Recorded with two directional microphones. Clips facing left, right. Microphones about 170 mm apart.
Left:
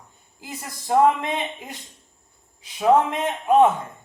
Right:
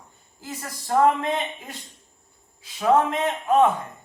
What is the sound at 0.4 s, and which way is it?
Speech, 15° left (ahead or behind).